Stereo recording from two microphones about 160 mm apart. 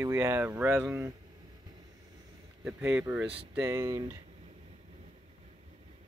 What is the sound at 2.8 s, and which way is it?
Speech, 15° right (ahead or behind).